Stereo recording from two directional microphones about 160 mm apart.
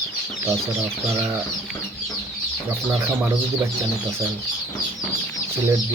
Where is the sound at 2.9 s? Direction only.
15° right (ahead or behind).